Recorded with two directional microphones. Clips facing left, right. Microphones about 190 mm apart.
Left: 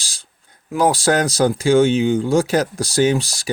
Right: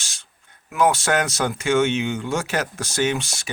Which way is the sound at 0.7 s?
35° left (ahead or behind).